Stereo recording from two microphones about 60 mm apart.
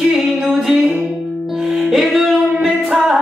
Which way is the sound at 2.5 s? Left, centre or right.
Centre.